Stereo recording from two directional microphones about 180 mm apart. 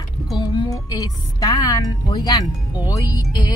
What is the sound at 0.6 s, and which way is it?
Speech, 20° left (ahead or behind).